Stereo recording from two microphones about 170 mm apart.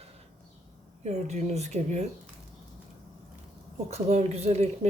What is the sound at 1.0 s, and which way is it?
Speech, 40° right (ahead or behind).